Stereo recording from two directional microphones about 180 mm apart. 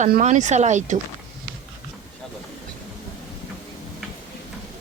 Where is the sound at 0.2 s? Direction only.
40° right (ahead or behind).